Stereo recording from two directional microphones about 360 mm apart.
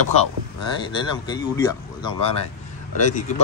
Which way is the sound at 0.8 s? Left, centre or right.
Centre.